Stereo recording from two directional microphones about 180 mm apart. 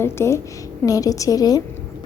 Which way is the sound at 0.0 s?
15° left (ahead or behind).